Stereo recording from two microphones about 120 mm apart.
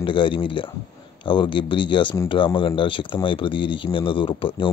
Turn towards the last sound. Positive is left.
turn(degrees=45)  # may be behind; listen again after turning